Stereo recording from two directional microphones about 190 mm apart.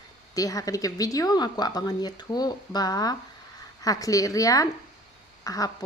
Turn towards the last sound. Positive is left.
turn(degrees=20)  # may be behind; listen again after turning